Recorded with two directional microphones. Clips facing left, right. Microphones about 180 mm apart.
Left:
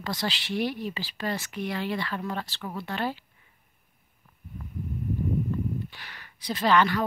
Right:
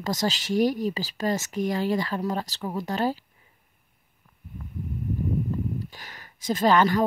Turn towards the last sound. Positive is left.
turn(degrees=-45)  # may be behind; listen again after turning